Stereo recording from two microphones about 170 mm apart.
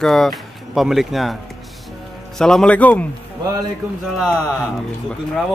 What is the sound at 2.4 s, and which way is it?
Speech, 5° left (ahead or behind).